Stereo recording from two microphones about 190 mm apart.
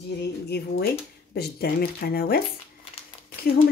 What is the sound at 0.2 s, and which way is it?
Speech, 60° left (ahead or behind).